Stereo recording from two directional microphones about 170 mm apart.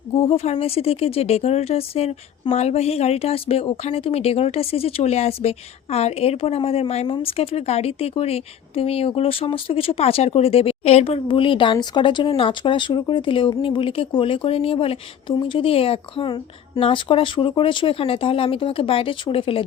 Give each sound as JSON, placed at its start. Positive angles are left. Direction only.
{"t": 0.1, "sound": "speech", "side_deg": 35}